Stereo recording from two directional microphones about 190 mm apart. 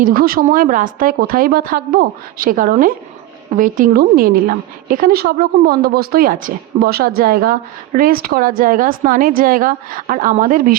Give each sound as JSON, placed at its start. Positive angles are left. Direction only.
{"t": 0.0, "sound": "a woman's voice", "side_deg": -50}